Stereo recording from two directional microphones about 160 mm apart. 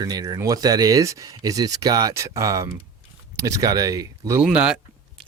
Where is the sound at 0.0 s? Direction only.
25° right (ahead or behind).